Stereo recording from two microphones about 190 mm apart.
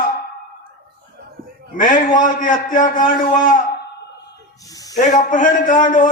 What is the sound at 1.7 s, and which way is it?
A man's voice, 45° left (ahead or behind).